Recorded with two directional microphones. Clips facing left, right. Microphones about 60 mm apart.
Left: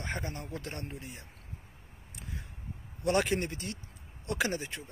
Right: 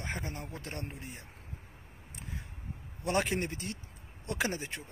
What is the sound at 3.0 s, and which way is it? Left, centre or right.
Speech, right.